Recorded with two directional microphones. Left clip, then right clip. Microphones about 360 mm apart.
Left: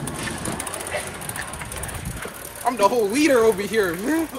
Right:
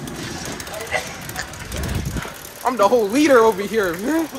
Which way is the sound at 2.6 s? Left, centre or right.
Centre.